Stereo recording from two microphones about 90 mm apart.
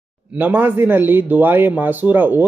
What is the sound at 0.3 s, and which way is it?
Speech, 20° right (ahead or behind).